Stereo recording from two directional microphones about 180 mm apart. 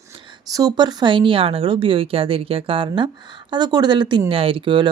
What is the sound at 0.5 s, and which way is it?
Speech, 20° right (ahead or behind).